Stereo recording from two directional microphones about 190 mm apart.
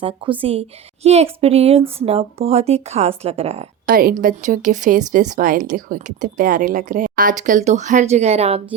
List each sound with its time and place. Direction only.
0.2 s a woman's voice: 25° right (ahead or behind)
3.8 s a woman's voice: 50° right (ahead or behind); by 8.6 s 35° right (ahead or behind)